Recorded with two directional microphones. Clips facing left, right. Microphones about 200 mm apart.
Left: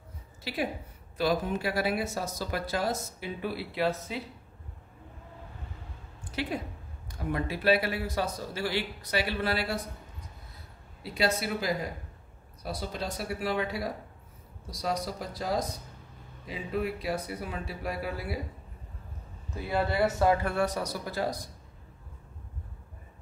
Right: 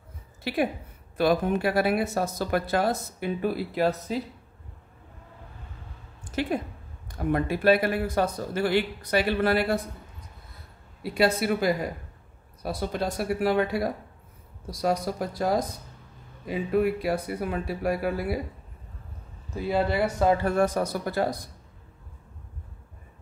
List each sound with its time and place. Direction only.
0.4 s a woman's voice: 55° right (ahead or behind)
6.2 s speech: 45° right (ahead or behind)
11.1 s speech: 55° right (ahead or behind)
19.5 s speech: 20° right (ahead or behind)
20.4 s speech: 45° right (ahead or behind)